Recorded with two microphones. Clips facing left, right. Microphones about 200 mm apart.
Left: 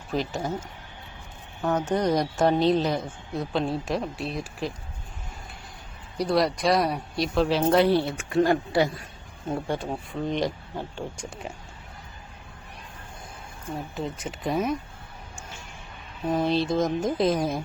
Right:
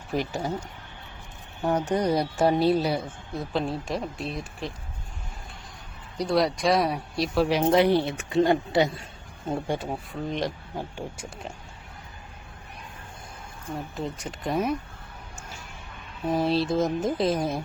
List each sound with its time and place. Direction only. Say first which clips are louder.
0.1 s speech: even; 15° right (ahead or behind)
1.6 s speech: even; 10° right (ahead or behind)
6.1 s speech: even; centre (ahead or behind)
7.4 s speech: even; 15° right (ahead or behind)
9.6 s speech: even; 5° right (ahead or behind)
13.7 s speech: even; centre (ahead or behind)
16.2 s speech: even; centre (ahead or behind)